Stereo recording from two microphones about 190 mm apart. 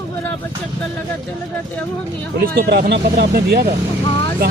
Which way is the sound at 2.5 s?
55° right (ahead or behind).